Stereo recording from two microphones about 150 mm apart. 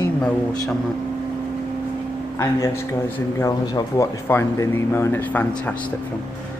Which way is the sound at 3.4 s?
20° left (ahead or behind).